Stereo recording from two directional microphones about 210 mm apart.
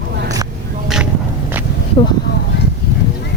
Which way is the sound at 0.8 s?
Centre (ahead or behind).